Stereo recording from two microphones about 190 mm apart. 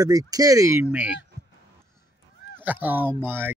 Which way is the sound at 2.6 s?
10° right (ahead or behind).